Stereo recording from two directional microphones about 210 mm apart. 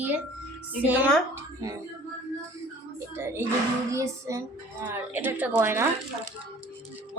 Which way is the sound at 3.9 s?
15° right (ahead or behind).